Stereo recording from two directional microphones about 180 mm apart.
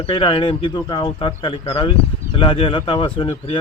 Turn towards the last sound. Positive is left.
turn(degrees=30)  # may be behind; listen again after turning